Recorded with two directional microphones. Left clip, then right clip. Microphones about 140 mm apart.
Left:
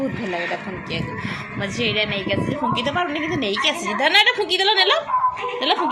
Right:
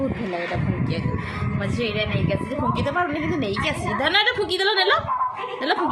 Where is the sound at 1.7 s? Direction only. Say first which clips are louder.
Left 4 dB; 15° right (ahead or behind).